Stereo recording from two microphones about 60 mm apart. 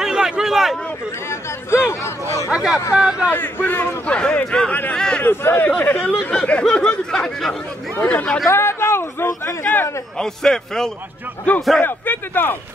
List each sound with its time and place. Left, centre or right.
0.0 s a sound: centre
1.7 s a man's voice: left
2.5 s speech: centre
3.3 s a man's voice: left
4.1 s speech: centre
4.6 s a man's voice: left
4.9 s a sound: centre
5.2 s a man's voice: left
5.8 s speech: left; by 7.5 s centre
8.0 s speech: left
8.5 s a man's voice: left
10.1 s speech: centre
11.8 s a man's voice: left